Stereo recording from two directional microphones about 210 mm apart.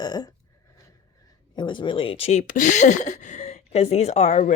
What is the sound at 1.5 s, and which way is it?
Speech, 20° left (ahead or behind).